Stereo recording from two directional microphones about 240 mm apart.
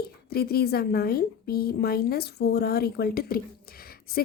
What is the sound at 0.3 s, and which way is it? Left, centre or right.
A woman's voice, left.